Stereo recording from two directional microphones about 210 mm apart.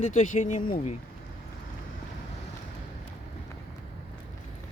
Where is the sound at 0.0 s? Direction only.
35° left (ahead or behind).